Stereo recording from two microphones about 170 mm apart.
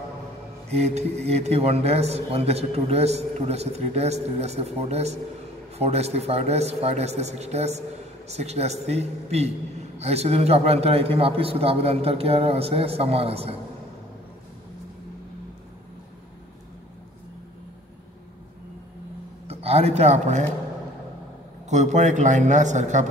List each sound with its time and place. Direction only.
0.7 s a man's voice: 40° right (ahead or behind)
19.4 s speech: 35° right (ahead or behind)
21.6 s a man's voice: 45° right (ahead or behind)